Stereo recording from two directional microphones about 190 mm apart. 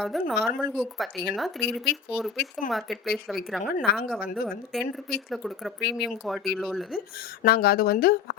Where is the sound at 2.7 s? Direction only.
Centre (ahead or behind).